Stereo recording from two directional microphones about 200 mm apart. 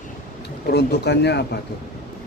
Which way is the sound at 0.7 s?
55° left (ahead or behind).